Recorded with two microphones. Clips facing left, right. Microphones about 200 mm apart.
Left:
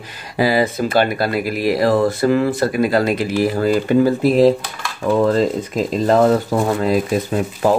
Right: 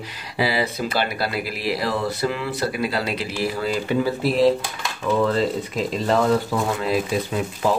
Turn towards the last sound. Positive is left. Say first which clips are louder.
# left 5 dB
turn(degrees=45)  # may be behind; listen again after turning